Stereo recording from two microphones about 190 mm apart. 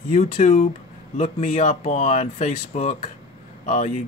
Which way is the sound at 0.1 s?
40° left (ahead or behind).